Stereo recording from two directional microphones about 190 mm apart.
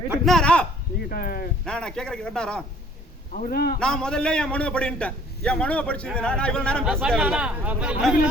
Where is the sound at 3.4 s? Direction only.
50° left (ahead or behind).